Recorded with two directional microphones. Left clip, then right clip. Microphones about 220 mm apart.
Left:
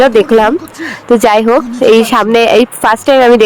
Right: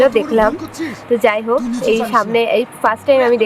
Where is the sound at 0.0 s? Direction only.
45° left (ahead or behind).